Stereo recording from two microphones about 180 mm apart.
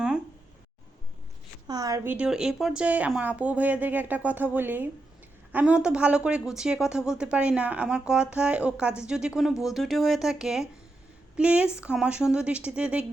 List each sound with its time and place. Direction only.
1.6 s a woman's voice: 20° right (ahead or behind)
2.1 s speech: 5° right (ahead or behind)